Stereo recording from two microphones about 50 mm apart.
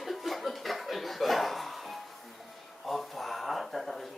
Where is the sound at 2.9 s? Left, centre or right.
Centre.